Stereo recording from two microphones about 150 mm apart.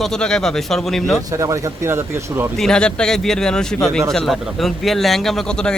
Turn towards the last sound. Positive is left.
turn(degrees=5)  # may be behind; listen again after turning